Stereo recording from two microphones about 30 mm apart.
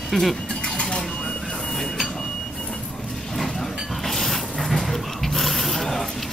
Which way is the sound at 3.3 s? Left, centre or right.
Centre.